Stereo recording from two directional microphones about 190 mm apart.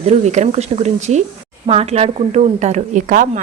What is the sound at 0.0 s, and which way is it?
A woman's voice, 35° right (ahead or behind).